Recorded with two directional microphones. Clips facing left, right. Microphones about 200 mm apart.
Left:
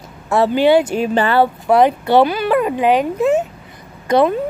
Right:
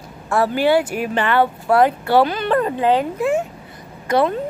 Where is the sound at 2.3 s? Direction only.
10° left (ahead or behind).